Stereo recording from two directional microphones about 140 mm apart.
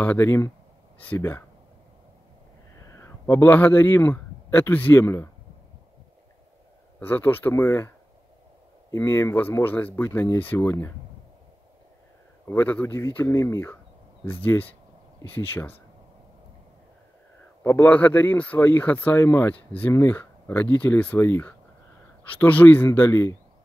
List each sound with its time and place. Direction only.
0.0 s speech: 15° left (ahead or behind)
2.7 s speech: 20° left (ahead or behind)
7.0 s speech: 15° left (ahead or behind)
8.9 s speech: 20° left (ahead or behind)
12.4 s speech: 15° left (ahead or behind)
17.6 s speech: 10° left (ahead or behind)